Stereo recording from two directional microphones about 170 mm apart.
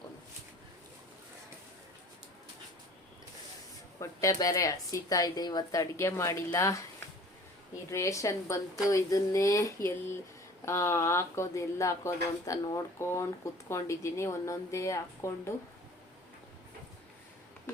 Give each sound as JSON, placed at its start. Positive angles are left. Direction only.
{"t": 4.0, "sound": "a woman's voice", "side_deg": 20}
{"t": 7.9, "sound": "a woman's voice", "side_deg": 15}